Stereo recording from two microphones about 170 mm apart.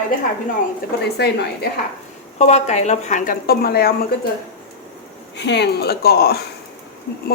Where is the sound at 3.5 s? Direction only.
65° left (ahead or behind).